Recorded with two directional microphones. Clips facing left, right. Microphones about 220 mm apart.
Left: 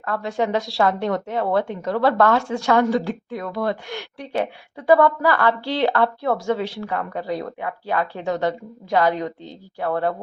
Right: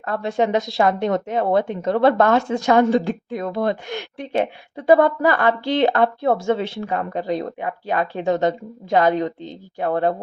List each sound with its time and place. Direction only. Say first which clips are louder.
0.0 s a woman's voice: right 3 dB; 25° right (ahead or behind)